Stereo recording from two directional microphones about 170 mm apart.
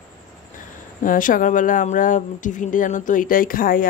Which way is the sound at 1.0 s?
50° left (ahead or behind).